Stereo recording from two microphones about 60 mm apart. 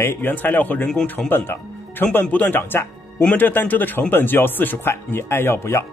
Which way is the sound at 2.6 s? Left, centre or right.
Left.